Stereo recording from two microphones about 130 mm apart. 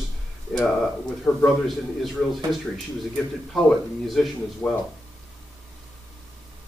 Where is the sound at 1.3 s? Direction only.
10° left (ahead or behind).